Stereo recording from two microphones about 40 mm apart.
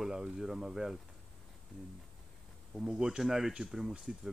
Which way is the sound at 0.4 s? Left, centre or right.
Centre.